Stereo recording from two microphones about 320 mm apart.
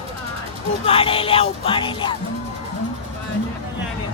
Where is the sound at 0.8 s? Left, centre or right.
Centre.